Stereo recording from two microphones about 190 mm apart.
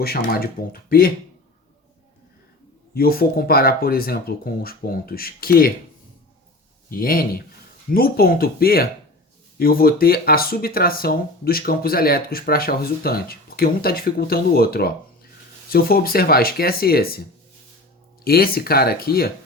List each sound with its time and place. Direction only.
0.0 s speech: 55° left (ahead or behind)
2.9 s speech: 50° left (ahead or behind)
6.9 s speech: 50° left (ahead or behind)
18.3 s speech: 50° left (ahead or behind)